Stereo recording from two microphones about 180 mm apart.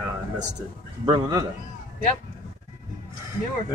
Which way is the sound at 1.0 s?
25° right (ahead or behind).